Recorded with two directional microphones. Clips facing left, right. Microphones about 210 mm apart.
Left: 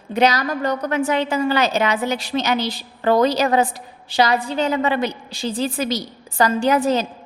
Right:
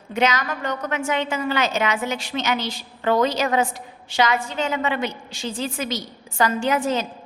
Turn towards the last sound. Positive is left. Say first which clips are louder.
# left 4 dB
turn(degrees=35)  # may be behind; listen again after turning